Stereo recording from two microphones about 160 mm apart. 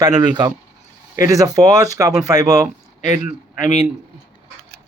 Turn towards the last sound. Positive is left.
turn(degrees=50)  # may be behind; listen again after turning